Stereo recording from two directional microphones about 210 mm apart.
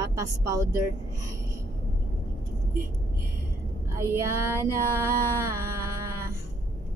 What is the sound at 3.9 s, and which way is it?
Speech, 15° right (ahead or behind).